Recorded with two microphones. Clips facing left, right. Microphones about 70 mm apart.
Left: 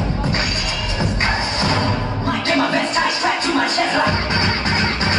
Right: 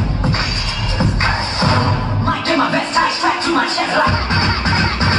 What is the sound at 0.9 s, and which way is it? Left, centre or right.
Music, right.